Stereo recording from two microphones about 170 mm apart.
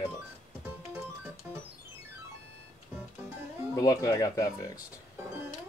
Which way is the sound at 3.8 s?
20° left (ahead or behind).